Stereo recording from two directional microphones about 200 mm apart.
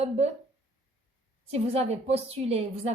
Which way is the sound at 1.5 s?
30° right (ahead or behind).